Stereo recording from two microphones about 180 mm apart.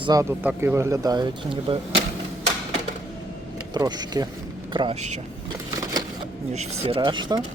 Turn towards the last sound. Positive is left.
turn(degrees=-25)  # may be behind; listen again after turning